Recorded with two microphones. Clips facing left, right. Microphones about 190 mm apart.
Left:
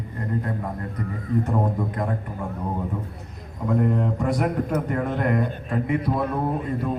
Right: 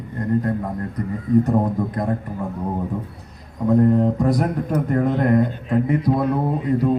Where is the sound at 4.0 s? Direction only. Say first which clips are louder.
Right 5 dB; 35° right (ahead or behind).